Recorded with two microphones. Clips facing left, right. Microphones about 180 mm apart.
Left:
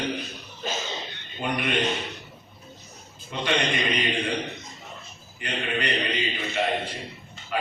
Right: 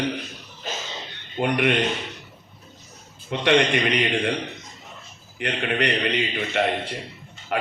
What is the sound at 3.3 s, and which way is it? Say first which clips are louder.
Speech: right 7 dB; 70° right (ahead or behind).